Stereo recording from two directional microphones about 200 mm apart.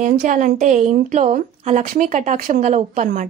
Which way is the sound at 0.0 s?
40° right (ahead or behind).